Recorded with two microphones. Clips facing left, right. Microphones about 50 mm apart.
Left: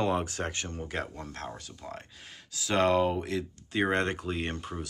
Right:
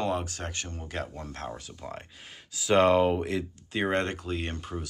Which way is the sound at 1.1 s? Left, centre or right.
Centre.